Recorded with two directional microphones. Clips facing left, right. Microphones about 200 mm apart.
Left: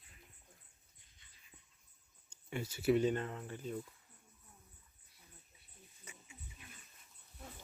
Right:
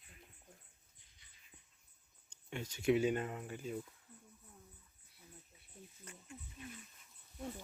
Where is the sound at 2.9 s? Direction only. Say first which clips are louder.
Left 1 dB; 10° right (ahead or behind).